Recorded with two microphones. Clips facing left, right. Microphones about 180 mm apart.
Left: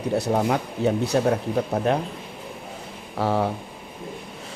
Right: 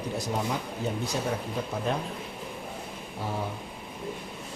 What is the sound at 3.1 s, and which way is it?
Speech, 75° left (ahead or behind).